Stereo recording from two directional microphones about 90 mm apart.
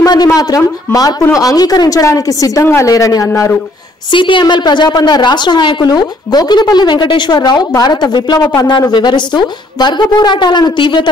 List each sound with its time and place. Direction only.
0.0 s a man's voice: 45° left (ahead or behind)
2.6 s a woman's voice: 25° left (ahead or behind)
2.9 s a woman's voice: 40° left (ahead or behind)
4.1 s a woman's voice: 65° left (ahead or behind)